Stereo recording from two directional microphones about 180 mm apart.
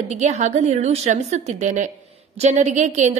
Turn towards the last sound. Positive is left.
turn(degrees=-40)  # may be behind; listen again after turning